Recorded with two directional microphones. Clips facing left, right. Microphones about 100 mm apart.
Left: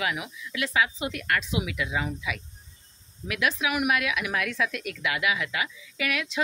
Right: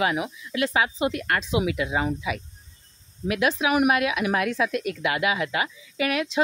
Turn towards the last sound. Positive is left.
turn(degrees=-30)  # may be behind; listen again after turning